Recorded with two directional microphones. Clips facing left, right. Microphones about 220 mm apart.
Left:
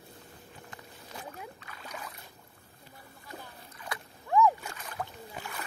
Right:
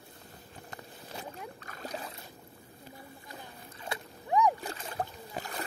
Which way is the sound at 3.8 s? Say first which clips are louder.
Right 2 dB; 20° right (ahead or behind).